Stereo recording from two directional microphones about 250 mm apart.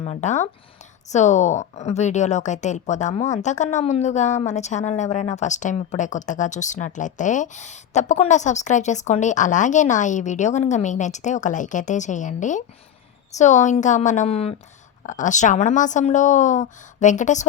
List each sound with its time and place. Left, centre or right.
0.0 s a woman's voice: left